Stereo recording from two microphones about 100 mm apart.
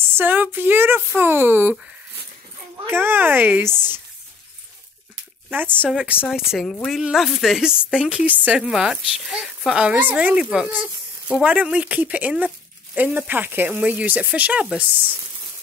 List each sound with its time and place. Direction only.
0.1 s speech: 20° right (ahead or behind)
2.9 s speech: 20° right (ahead or behind)
5.5 s a woman's voice: 20° right (ahead or behind)